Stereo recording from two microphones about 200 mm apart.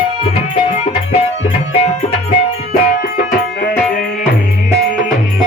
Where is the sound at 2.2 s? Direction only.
45° left (ahead or behind).